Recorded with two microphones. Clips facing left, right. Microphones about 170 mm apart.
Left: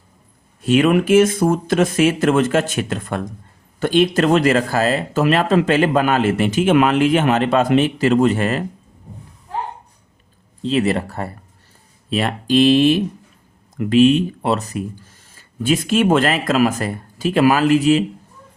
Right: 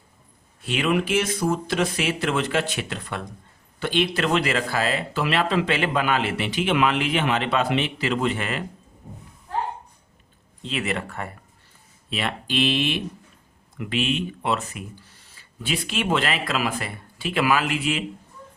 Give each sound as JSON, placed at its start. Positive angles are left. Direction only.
{"t": 0.6, "sound": "speech", "side_deg": 45}
{"t": 10.6, "sound": "speech", "side_deg": 35}